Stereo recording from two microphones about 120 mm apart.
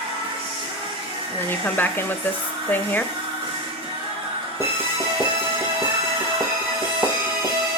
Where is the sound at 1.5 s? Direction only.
15° left (ahead or behind).